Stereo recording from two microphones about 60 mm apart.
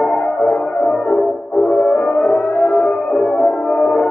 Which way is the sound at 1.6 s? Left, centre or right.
Centre.